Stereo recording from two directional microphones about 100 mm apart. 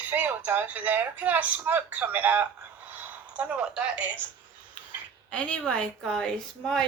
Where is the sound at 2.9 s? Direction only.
15° right (ahead or behind).